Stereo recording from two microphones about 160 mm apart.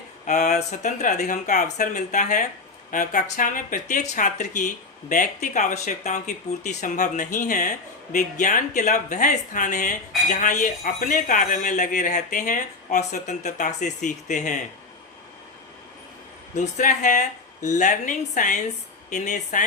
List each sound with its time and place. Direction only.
0.3 s speech: 50° left (ahead or behind)
16.6 s speech: 50° left (ahead or behind)